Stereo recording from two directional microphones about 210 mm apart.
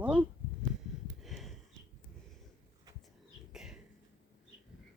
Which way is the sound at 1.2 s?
Centre (ahead or behind).